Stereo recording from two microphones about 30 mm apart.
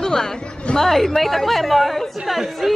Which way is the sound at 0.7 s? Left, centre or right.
Centre.